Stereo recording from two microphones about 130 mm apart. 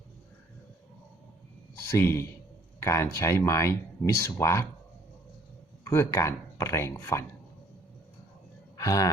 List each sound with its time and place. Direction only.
1.9 s speech: 20° left (ahead or behind)
5.9 s speech: 20° left (ahead or behind)
8.8 s a sound: 25° left (ahead or behind)